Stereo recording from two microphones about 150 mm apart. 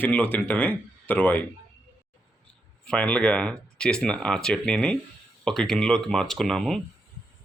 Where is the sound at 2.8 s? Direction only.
10° left (ahead or behind).